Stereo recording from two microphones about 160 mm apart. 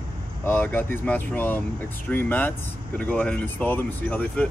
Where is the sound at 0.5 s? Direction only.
10° left (ahead or behind).